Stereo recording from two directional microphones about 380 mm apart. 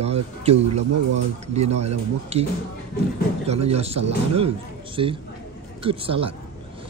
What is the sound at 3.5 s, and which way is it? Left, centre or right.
Speech, centre.